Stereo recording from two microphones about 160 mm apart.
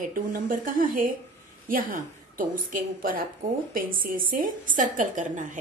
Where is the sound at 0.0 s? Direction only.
60° right (ahead or behind).